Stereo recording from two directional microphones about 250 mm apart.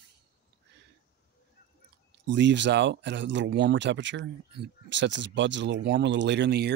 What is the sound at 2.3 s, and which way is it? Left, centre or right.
Speech, right.